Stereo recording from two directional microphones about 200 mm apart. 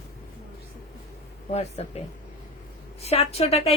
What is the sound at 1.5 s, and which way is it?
Speech, 30° left (ahead or behind).